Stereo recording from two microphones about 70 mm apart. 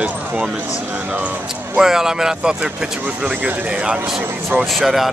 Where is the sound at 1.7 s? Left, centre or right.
Centre.